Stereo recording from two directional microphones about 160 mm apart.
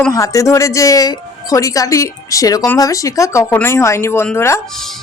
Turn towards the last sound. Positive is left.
turn(degrees=15)  # may be behind; listen again after turning